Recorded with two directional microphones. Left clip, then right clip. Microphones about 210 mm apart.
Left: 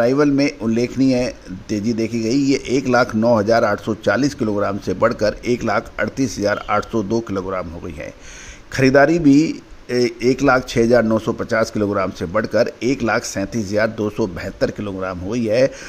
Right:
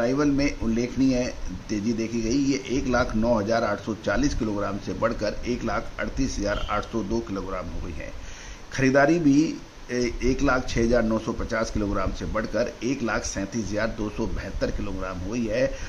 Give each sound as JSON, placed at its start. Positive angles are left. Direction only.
{"t": 0.0, "sound": "speech", "side_deg": 35}
{"t": 8.7, "sound": "speech", "side_deg": 40}